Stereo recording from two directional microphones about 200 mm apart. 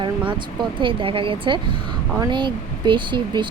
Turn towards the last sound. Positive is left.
turn(degrees=-25)  # may be behind; listen again after turning